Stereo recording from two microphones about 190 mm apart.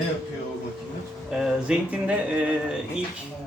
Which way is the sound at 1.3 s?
5° right (ahead or behind).